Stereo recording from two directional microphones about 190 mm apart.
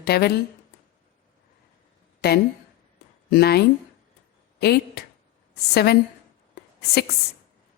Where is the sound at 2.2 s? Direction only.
55° left (ahead or behind).